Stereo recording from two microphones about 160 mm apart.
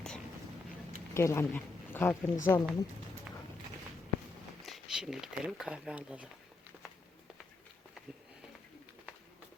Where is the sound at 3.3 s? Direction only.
10° right (ahead or behind).